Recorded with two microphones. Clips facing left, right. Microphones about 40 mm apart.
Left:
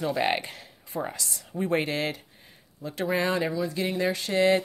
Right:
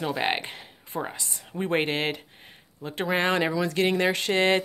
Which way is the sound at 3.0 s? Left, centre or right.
Right.